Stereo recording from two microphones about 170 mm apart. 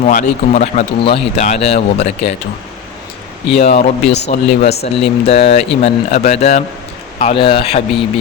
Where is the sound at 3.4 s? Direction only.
40° left (ahead or behind).